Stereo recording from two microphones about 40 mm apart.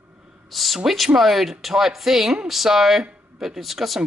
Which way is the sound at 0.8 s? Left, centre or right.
Centre.